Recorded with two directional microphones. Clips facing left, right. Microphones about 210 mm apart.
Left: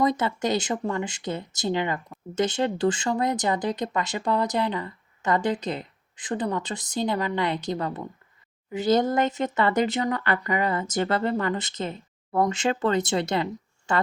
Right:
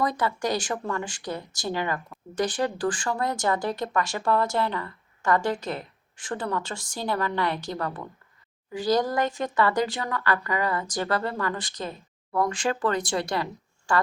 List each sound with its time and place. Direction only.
0.0 s speech: 20° left (ahead or behind)